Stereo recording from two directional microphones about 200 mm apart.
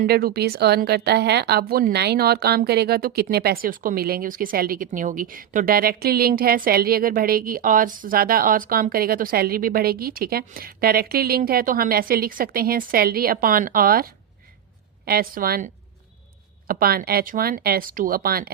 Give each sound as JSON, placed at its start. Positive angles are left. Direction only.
{"t": 0.0, "sound": "a woman's voice", "side_deg": -50}